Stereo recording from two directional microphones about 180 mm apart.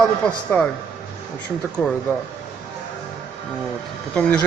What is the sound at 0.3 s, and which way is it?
Speech, 5° left (ahead or behind).